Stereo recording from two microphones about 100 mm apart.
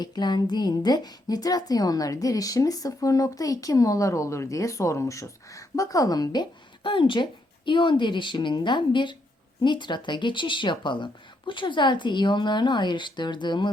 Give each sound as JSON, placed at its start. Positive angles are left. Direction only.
{"t": 0.0, "sound": "speech", "side_deg": 45}